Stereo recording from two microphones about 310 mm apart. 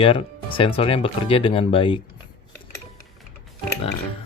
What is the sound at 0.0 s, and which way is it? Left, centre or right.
Speech, centre.